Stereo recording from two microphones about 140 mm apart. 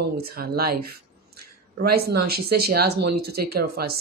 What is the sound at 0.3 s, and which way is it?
Speech, 90° right.